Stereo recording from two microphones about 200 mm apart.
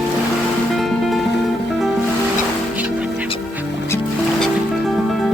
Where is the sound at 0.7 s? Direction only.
Centre (ahead or behind).